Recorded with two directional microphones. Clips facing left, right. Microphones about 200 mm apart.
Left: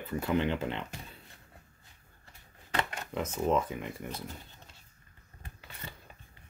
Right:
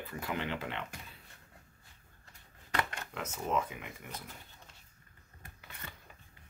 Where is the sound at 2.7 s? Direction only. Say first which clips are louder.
Left 3 dB; 25° left (ahead or behind).